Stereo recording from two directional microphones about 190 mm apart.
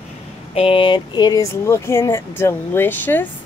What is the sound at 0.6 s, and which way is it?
Speech, 30° left (ahead or behind).